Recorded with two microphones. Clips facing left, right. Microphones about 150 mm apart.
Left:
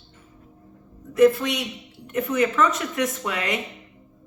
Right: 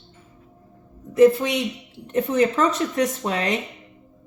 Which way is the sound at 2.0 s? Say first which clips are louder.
Right 3 dB; 30° right (ahead or behind).